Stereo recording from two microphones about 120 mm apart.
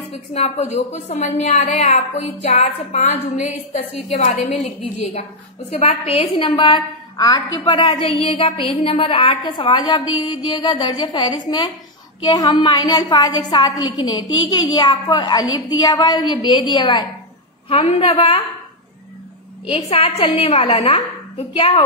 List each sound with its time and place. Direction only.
0.1 s a woman's voice: 60° left (ahead or behind)
7.2 s a woman's voice: 35° left (ahead or behind)
17.6 s a woman's voice: 50° left (ahead or behind)
19.7 s a woman's voice: 55° left (ahead or behind)